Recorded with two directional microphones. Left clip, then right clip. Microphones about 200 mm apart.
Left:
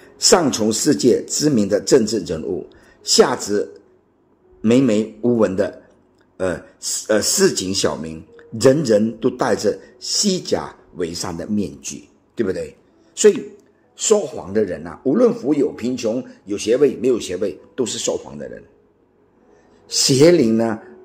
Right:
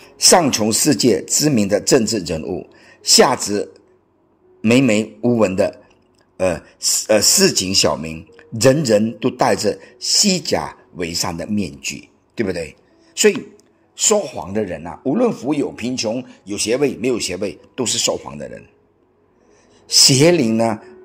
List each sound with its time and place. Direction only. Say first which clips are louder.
0.0 s speech: right 2 dB; 25° right (ahead or behind)
19.9 s speech: right 1 dB; 30° right (ahead or behind)